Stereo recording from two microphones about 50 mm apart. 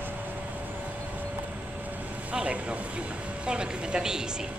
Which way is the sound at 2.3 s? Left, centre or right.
Right.